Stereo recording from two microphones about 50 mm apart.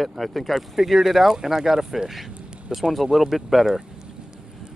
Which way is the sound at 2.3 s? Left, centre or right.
Right.